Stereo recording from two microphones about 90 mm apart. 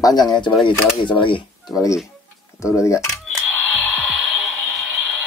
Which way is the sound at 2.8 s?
35° left (ahead or behind).